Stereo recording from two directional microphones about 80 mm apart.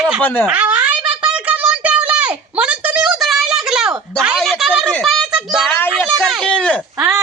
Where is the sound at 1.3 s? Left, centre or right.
Centre.